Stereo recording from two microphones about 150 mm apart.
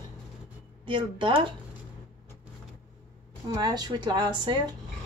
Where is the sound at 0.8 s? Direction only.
35° right (ahead or behind).